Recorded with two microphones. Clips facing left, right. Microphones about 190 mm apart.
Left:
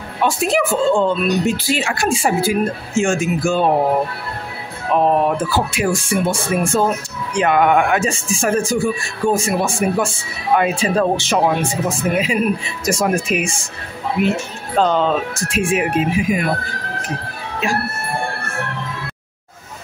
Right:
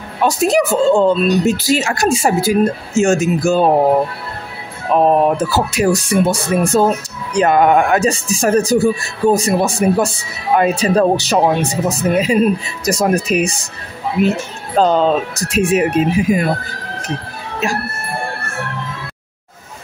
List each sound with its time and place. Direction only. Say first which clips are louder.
0.2 s speech: right 3 dB; 40° right (ahead or behind)
4.9 s speech: right 3 dB; 40° right (ahead or behind)
14.8 s speech: right 3 dB; 40° right (ahead or behind)